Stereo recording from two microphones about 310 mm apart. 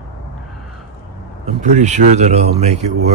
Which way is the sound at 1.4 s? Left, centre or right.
Right.